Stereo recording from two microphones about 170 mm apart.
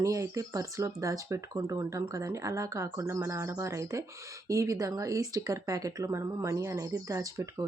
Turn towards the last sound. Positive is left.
turn(degrees=-20)  # may be behind; listen again after turning